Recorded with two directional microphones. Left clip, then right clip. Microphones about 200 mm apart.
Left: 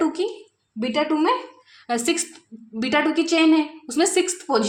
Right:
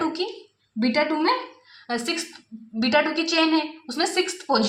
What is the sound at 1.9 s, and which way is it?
A woman's voice, 35° left (ahead or behind).